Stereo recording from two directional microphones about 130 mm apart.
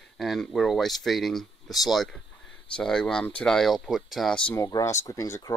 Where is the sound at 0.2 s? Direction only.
Centre (ahead or behind).